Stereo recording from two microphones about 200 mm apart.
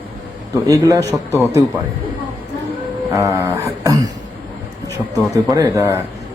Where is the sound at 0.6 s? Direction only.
15° right (ahead or behind).